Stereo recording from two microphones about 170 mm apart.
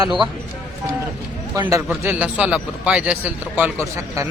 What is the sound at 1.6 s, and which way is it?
Speech, 15° right (ahead or behind).